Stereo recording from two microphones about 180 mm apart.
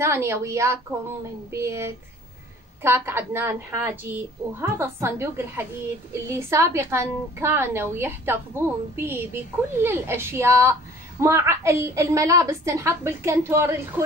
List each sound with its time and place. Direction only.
0.0 s a woman's voice: 15° right (ahead or behind)